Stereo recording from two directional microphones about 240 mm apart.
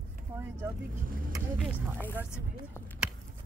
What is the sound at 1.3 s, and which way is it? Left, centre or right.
Speech, centre.